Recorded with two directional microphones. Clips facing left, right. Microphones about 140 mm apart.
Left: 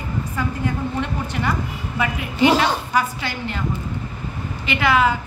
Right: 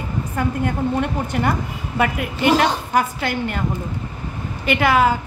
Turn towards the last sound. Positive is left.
turn(degrees=-45)  # may be behind; listen again after turning